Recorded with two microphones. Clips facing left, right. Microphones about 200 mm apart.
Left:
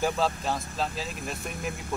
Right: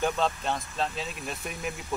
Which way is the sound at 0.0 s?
5° left (ahead or behind).